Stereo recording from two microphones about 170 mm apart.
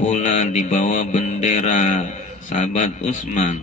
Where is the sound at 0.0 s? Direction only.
40° left (ahead or behind).